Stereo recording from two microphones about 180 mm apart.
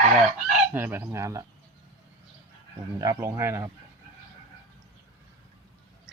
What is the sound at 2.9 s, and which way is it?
Speech, 15° right (ahead or behind).